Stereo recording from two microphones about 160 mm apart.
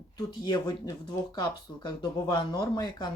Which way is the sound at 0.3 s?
25° left (ahead or behind).